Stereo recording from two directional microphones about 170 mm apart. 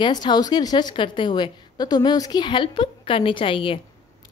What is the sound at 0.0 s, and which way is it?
A woman's voice, 25° left (ahead or behind).